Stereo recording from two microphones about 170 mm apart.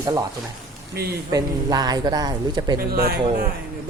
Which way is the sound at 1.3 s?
20° right (ahead or behind).